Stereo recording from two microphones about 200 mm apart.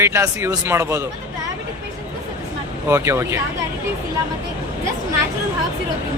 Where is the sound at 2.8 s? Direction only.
10° right (ahead or behind).